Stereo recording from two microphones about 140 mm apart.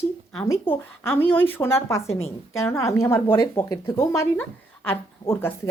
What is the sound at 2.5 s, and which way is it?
Speech, 20° left (ahead or behind).